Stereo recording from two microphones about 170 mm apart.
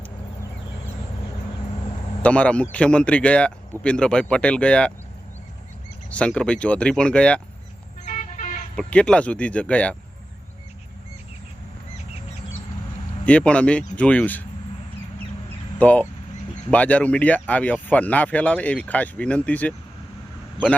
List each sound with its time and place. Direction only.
2.2 s speech: 5° left (ahead or behind)
6.1 s speech: 5° left (ahead or behind)
8.0 s vehicle: 50° left (ahead or behind)
8.7 s speech: 5° left (ahead or behind)
13.2 s speech: 5° left (ahead or behind)
15.8 s speech: 10° left (ahead or behind)